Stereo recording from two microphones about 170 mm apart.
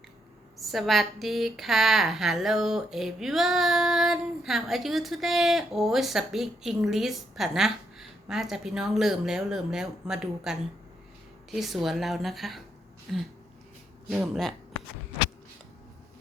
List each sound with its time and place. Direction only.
0.5 s a woman's voice: centre (ahead or behind)